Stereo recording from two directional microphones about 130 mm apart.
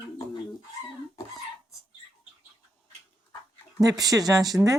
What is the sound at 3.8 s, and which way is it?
Speech, 30° right (ahead or behind).